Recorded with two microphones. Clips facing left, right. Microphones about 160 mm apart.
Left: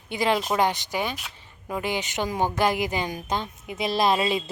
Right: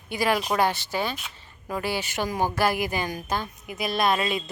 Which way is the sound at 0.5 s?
15° left (ahead or behind).